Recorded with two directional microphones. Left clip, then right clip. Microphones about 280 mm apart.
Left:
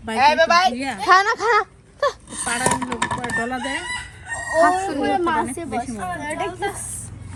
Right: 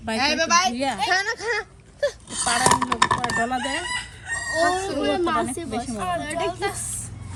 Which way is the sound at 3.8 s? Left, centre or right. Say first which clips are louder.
Even; centre.